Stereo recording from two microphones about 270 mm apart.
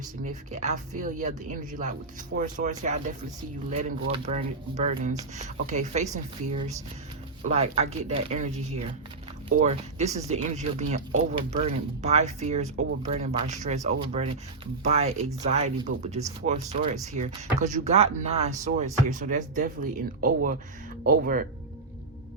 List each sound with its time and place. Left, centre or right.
0.3 s speech: right